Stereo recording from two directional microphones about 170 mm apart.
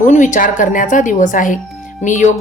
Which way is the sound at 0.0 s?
50° left (ahead or behind).